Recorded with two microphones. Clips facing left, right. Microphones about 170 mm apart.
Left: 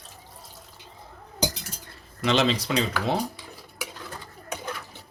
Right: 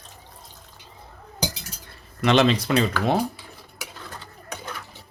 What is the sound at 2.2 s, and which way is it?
Speech, 60° right (ahead or behind).